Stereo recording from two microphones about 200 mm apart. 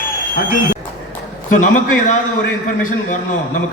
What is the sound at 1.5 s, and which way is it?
Speech, 40° left (ahead or behind).